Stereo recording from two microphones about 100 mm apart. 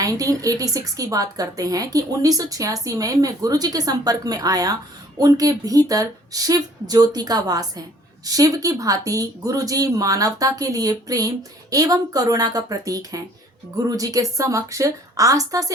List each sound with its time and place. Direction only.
0.0 s a woman's voice: 35° right (ahead or behind)